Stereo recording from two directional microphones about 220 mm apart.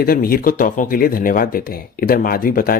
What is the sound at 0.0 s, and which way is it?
Speech, 40° left (ahead or behind).